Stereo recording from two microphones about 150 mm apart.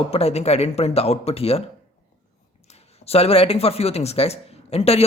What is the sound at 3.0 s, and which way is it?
A man's voice, 40° left (ahead or behind).